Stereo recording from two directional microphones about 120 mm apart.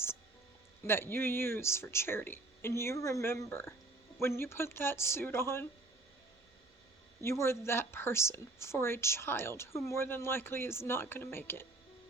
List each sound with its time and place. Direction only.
0.9 s speech: 20° left (ahead or behind)
7.3 s speech: 20° left (ahead or behind)